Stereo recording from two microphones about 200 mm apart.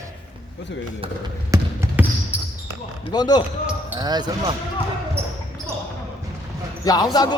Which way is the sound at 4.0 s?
20° right (ahead or behind).